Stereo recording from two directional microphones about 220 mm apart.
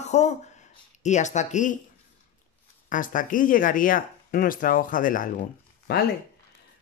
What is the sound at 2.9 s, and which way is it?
Speech, 35° left (ahead or behind).